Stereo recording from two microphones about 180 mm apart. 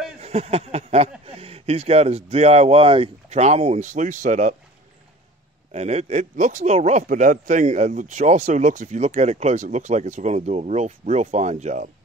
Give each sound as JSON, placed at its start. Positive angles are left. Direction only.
{"t": 0.2, "sound": "a sound", "side_deg": -35}
{"t": 1.2, "sound": "speech", "side_deg": -35}
{"t": 5.7, "sound": "speech", "side_deg": -35}